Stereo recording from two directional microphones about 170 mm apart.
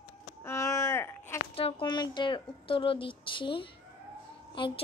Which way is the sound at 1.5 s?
35° left (ahead or behind).